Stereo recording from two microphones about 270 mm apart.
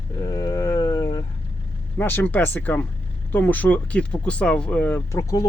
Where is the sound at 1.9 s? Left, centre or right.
Centre.